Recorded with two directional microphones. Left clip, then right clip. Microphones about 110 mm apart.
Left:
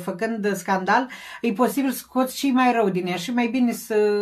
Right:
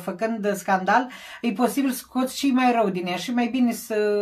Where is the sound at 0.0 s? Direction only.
15° right (ahead or behind).